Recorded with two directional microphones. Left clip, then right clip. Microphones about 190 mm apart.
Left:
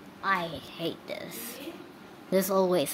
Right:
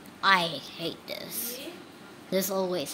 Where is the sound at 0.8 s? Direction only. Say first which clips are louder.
Left 4 dB; 5° left (ahead or behind).